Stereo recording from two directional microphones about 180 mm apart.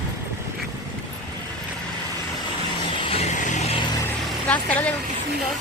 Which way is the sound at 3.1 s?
35° left (ahead or behind).